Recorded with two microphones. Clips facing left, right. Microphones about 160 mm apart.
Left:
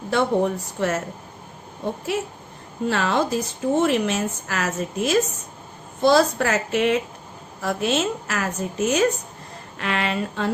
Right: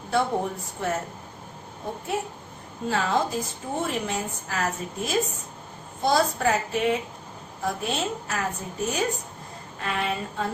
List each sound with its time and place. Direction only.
0.1 s speech: 90° left
2.1 s a woman's voice: 85° left